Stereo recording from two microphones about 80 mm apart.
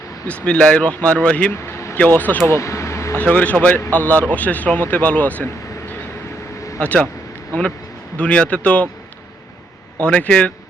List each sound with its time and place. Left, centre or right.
0.3 s speech: centre
1.5 s vehicle: left
2.0 s speech: left
2.5 s a sound: left
3.2 s speech: centre
6.7 s speech: centre
8.2 s speech: centre
10.0 s speech: centre